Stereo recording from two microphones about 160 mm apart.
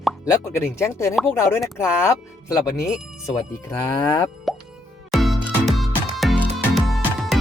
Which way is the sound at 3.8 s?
20° left (ahead or behind).